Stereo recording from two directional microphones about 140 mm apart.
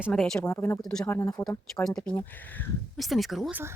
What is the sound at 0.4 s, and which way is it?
Speech, 20° left (ahead or behind).